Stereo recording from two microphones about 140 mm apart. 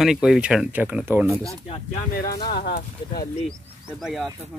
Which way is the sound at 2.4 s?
90° left.